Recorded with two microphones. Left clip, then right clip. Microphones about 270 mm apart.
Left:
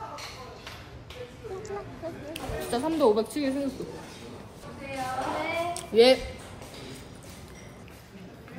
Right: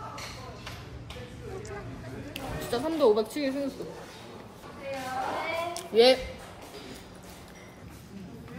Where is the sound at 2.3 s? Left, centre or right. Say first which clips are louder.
Even; centre.